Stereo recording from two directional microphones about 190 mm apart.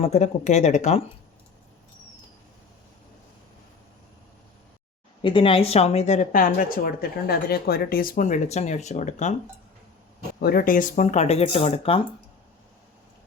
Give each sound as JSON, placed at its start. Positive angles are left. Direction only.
{"t": 0.0, "sound": "a woman's voice", "side_deg": 35}
{"t": 5.2, "sound": "a woman's voice", "side_deg": 25}
{"t": 10.4, "sound": "a woman's voice", "side_deg": 50}